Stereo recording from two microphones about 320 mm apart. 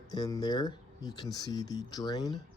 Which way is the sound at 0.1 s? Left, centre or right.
Centre.